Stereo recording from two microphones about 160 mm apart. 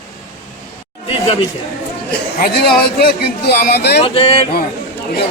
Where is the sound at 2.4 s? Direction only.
80° left.